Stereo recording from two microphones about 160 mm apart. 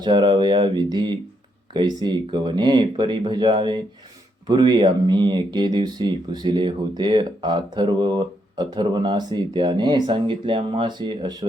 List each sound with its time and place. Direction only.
0.0 s speech: 30° right (ahead or behind)